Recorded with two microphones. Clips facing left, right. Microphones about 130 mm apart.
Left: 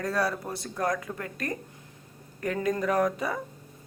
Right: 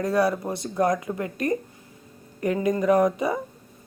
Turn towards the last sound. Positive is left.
turn(degrees=-15)  # may be behind; listen again after turning